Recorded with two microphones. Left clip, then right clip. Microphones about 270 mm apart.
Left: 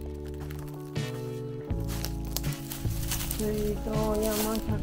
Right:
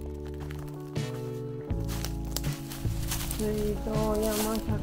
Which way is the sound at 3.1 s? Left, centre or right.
Centre.